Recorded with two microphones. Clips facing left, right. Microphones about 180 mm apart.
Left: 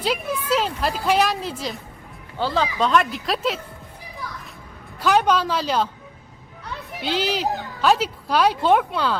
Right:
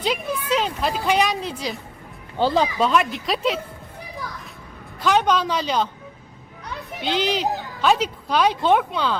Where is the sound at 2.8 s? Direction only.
5° right (ahead or behind).